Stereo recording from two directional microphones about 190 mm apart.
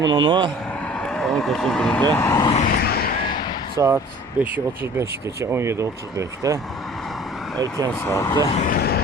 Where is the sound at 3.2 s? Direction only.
25° left (ahead or behind).